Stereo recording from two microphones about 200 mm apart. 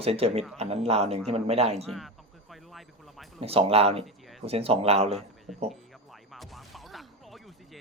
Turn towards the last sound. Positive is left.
turn(degrees=0)  # may be behind; listen again after turning